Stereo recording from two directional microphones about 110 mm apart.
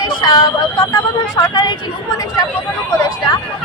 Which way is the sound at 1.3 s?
35° left (ahead or behind).